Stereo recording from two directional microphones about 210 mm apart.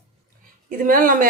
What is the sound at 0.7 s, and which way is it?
Speech, 40° right (ahead or behind).